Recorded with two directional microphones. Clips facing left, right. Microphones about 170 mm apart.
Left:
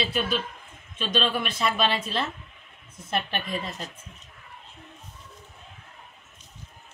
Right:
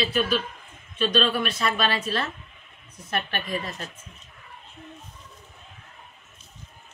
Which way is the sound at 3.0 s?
20° left (ahead or behind).